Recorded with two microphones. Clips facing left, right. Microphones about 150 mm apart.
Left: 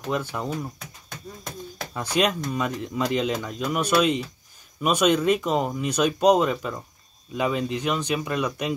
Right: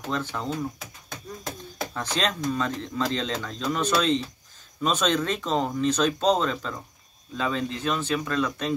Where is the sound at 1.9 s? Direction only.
10° left (ahead or behind).